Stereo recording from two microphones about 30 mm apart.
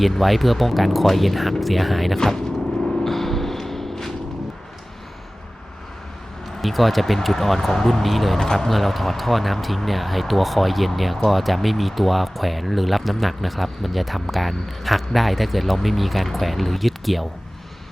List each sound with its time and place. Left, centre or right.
0.0 s speech: centre
2.1 s speech: centre
3.0 s vehicle: centre
6.6 s speech: centre
8.4 s speech: centre
8.7 s speech: centre